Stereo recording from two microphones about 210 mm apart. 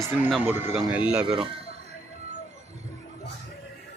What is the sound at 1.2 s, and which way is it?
Speech, 25° right (ahead or behind).